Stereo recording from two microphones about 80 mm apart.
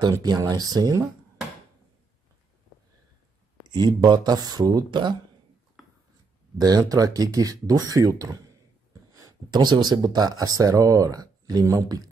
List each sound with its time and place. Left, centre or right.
0.2 s speech: right
3.7 s speech: right
5.8 s a sound: centre
6.6 s speech: right